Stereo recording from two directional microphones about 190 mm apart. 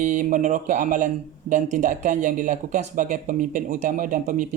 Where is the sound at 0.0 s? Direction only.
40° right (ahead or behind).